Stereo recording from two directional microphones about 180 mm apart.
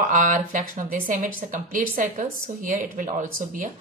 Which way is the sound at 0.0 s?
50° right (ahead or behind).